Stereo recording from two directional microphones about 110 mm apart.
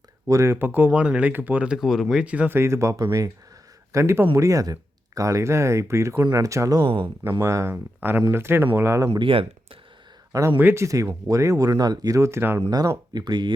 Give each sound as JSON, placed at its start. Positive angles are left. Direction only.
{"t": 0.3, "sound": "speech", "side_deg": -25}
{"t": 2.6, "sound": "speech", "side_deg": -25}
{"t": 6.8, "sound": "speech", "side_deg": -50}
{"t": 7.3, "sound": "speech", "side_deg": -25}
{"t": 9.1, "sound": "speech", "side_deg": -55}
{"t": 10.6, "sound": "speech", "side_deg": -20}
{"t": 12.7, "sound": "speech", "side_deg": -35}